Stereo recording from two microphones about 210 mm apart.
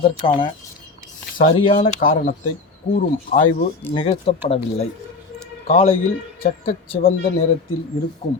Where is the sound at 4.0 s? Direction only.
30° left (ahead or behind).